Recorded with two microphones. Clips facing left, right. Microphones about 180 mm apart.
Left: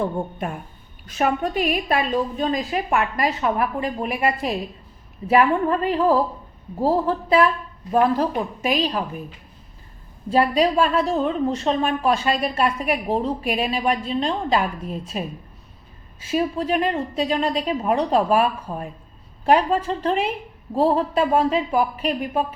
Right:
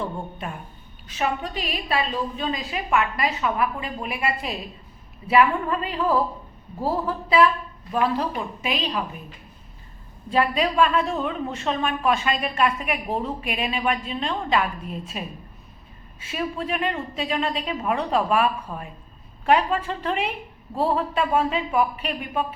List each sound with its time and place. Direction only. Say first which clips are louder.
0.0 s a woman's voice: left 6 dB; 50° left (ahead or behind)
10.2 s a woman's voice: left 4 dB; 40° left (ahead or behind)
16.2 s a woman's voice: left 6 dB; 40° left (ahead or behind)